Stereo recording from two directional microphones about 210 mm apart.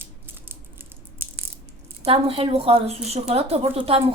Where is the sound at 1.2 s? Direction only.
10° right (ahead or behind).